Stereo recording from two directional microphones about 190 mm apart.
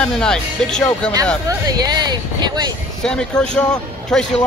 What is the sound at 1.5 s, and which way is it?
Speech, 20° right (ahead or behind).